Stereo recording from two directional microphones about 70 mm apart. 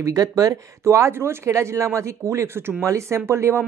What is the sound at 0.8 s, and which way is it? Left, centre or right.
Speech, right.